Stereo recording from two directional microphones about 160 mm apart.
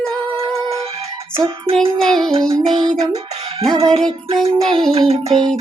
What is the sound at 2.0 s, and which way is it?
Music, 5° left (ahead or behind).